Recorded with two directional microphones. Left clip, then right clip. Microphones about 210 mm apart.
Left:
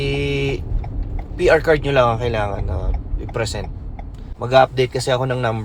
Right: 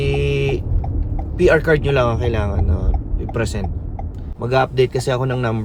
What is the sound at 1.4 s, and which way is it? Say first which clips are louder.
Speech: even; 15° right (ahead or behind).